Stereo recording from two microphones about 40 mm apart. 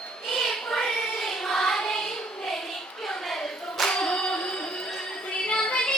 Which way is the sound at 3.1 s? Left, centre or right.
Centre.